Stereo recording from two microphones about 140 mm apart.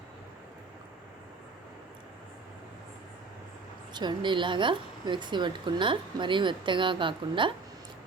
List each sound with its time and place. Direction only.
3.9 s a woman's voice: 35° right (ahead or behind)